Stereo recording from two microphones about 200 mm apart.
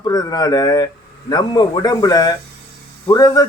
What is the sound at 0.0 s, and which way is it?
Speech, 20° left (ahead or behind).